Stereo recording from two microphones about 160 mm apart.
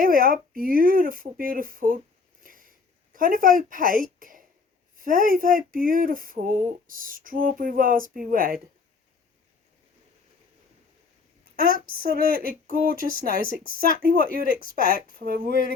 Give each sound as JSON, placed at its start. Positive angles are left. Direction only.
{"t": 0.0, "sound": "speech", "side_deg": -65}
{"t": 2.4, "sound": "a sound", "side_deg": -60}
{"t": 4.9, "sound": "speech", "side_deg": -60}
{"t": 11.9, "sound": "speech", "side_deg": -65}